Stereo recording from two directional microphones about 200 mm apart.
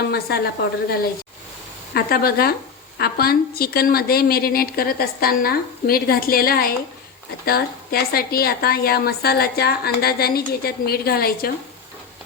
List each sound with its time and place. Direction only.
0.0 s a woman's voice: 55° left (ahead or behind)